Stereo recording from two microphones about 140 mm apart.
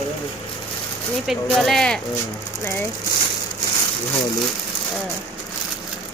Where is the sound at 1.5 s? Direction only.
5° left (ahead or behind).